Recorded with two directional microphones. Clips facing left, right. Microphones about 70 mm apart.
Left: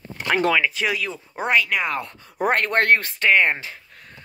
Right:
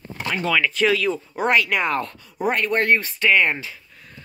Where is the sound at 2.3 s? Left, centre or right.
Left.